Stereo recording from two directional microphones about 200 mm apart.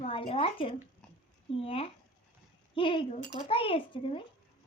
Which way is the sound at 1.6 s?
30° left (ahead or behind).